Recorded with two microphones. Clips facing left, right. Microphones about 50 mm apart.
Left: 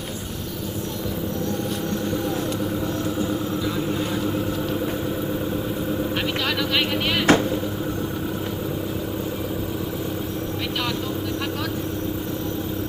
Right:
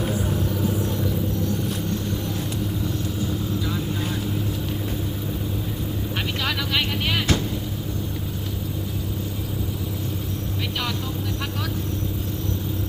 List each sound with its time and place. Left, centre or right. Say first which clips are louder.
7.3 s vehicle: left 9 dB; left